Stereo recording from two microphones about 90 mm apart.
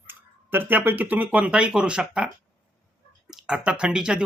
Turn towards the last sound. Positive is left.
turn(degrees=-10)  # may be behind; listen again after turning